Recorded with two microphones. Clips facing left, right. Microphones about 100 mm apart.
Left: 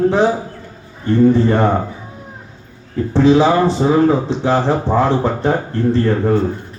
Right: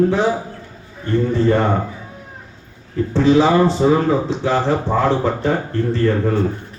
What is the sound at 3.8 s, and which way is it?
Speech, 40° left (ahead or behind).